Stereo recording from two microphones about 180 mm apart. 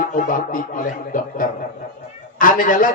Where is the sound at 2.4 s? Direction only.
50° left (ahead or behind).